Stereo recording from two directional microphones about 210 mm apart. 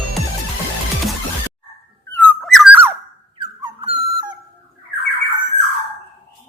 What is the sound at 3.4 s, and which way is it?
Dog, 25° right (ahead or behind).